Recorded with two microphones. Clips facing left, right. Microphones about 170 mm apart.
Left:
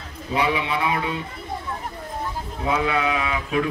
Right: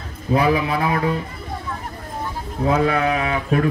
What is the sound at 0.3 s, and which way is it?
Speech, 35° right (ahead or behind).